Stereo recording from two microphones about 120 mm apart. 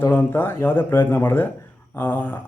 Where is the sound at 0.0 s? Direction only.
20° left (ahead or behind).